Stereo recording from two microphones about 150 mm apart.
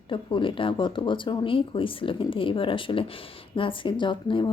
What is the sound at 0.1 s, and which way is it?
Speech, 35° left (ahead or behind).